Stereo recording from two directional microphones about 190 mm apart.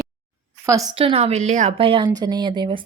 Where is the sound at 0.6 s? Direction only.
15° right (ahead or behind).